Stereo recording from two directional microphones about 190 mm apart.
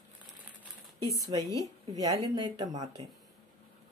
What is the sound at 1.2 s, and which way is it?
A woman's voice, 15° right (ahead or behind).